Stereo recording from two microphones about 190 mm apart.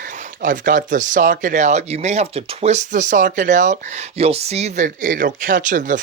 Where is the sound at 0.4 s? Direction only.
45° right (ahead or behind).